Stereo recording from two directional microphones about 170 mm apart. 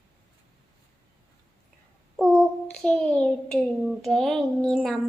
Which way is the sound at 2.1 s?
Centre (ahead or behind).